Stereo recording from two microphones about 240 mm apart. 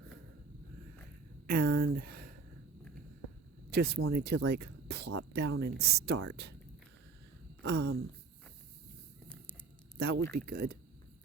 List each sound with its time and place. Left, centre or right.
1.5 s speech: right
3.7 s speech: right
7.6 s speech: right
10.3 s speech: right